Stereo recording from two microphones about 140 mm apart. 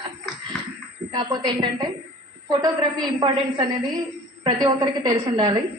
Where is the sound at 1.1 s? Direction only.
30° right (ahead or behind).